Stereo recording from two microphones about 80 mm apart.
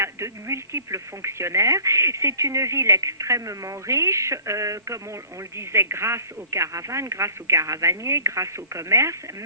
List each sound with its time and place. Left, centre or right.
0.0 s speech: right